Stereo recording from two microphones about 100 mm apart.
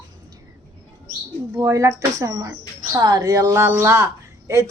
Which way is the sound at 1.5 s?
30° right (ahead or behind).